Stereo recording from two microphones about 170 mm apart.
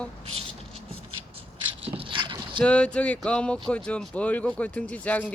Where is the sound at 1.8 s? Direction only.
35° right (ahead or behind).